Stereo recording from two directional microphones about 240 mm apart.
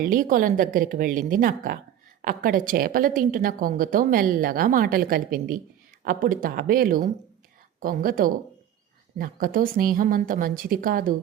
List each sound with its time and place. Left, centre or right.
0.0 s a woman's voice: right